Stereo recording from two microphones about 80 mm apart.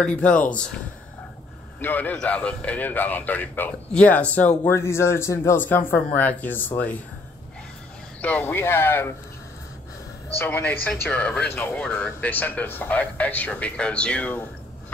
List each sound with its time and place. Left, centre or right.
0.0 s speech: centre
1.8 s speech: left
4.6 s speech: left
5.6 s speech: left
8.2 s speech: centre
10.3 s speech: left
11.7 s speech: centre